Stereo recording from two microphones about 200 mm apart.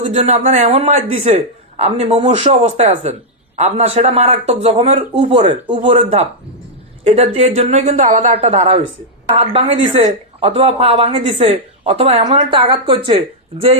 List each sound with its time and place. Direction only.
0.0 s speech: 30° right (ahead or behind)